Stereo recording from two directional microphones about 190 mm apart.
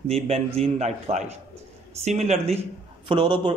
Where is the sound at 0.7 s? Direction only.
35° right (ahead or behind).